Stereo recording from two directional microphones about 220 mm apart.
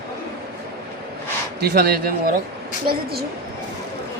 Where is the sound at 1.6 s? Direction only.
45° right (ahead or behind).